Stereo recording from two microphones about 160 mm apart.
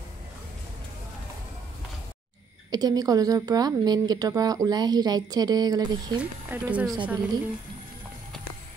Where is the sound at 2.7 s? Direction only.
25° right (ahead or behind).